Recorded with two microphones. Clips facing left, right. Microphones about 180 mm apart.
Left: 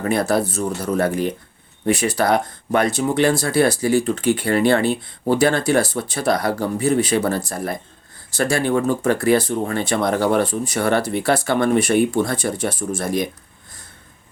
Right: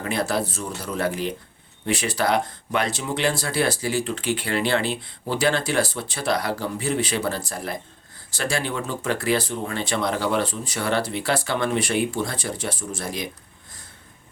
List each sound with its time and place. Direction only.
0.0 s speech: 50° left (ahead or behind)